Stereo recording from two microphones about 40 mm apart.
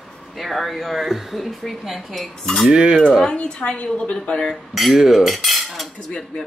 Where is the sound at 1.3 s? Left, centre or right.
Centre.